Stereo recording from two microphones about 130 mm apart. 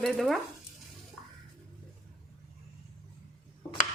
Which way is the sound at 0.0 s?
Centre (ahead or behind).